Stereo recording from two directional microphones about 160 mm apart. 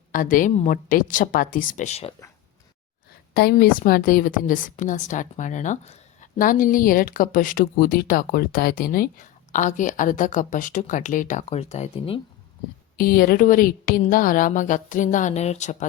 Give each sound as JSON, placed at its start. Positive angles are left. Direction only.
{"t": 0.1, "sound": "a woman's voice", "side_deg": 55}
{"t": 3.3, "sound": "a woman's voice", "side_deg": 75}
{"t": 6.4, "sound": "a woman's voice", "side_deg": 60}
{"t": 13.0, "sound": "a woman's voice", "side_deg": 65}